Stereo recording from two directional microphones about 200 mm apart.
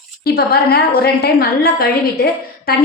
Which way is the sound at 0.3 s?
50° left (ahead or behind).